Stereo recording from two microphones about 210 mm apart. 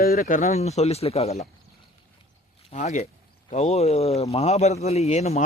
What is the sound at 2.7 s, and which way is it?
Speech, 30° left (ahead or behind).